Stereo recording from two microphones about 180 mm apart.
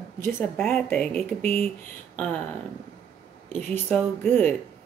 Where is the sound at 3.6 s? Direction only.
5° left (ahead or behind).